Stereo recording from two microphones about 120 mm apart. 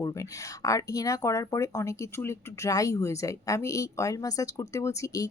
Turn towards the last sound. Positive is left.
turn(degrees=30)  # may be behind; listen again after turning